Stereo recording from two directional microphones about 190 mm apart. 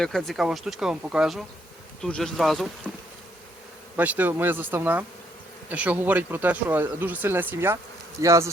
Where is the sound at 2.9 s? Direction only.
Centre (ahead or behind).